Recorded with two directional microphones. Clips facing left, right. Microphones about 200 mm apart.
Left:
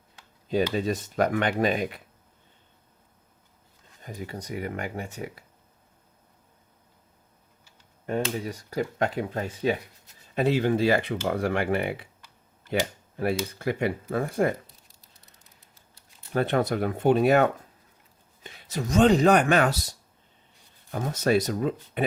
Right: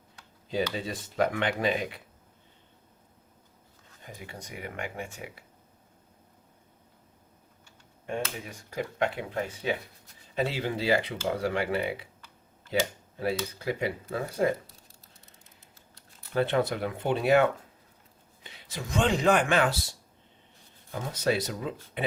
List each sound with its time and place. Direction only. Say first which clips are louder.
0.8 s speech: left 4 dB; 45° left (ahead or behind)
4.0 s speech: left 7 dB; 40° left (ahead or behind)
8.0 s speech: left 6 dB; 40° left (ahead or behind)
10.3 s speech: left 7 dB; 50° left (ahead or behind)
13.1 s speech: left 3 dB; 55° left (ahead or behind)
16.3 s speech: left 2 dB; 50° left (ahead or behind)